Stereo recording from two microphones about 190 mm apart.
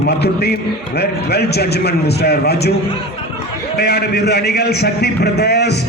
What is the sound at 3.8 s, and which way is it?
A man's voice, 60° left (ahead or behind).